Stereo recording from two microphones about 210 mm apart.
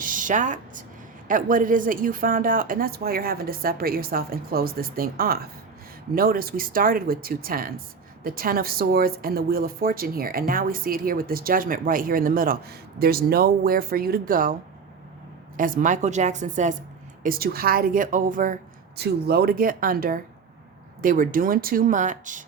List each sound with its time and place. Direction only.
0.0 s a woman's voice: 40° right (ahead or behind)
15.5 s speech: 40° right (ahead or behind)
17.2 s speech: 45° right (ahead or behind)
18.9 s speech: 50° right (ahead or behind)